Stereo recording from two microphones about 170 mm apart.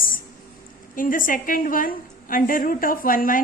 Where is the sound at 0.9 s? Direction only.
55° left (ahead or behind).